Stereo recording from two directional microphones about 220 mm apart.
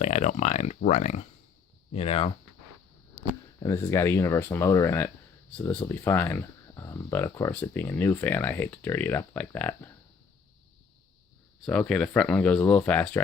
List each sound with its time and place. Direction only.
0.0 s speech: 30° left (ahead or behind)
3.6 s speech: 15° left (ahead or behind)
11.6 s speech: 5° left (ahead or behind)